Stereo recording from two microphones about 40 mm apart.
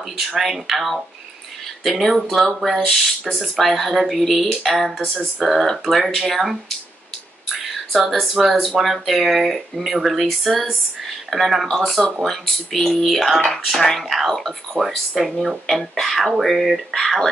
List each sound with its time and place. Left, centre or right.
0.4 s speech: centre
7.5 s a sound: centre
8.5 s speech: centre
15.1 s speech: centre